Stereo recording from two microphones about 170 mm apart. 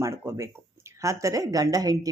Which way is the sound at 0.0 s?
15° right (ahead or behind).